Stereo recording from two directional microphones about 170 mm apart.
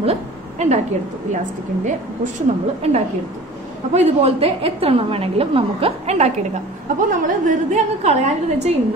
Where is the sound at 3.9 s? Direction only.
40° right (ahead or behind).